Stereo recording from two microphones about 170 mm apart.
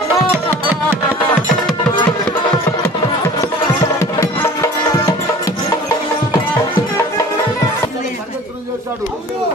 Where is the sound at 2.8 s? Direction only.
20° left (ahead or behind).